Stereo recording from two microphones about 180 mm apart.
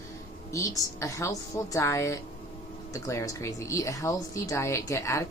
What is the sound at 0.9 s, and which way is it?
Speech, 15° left (ahead or behind).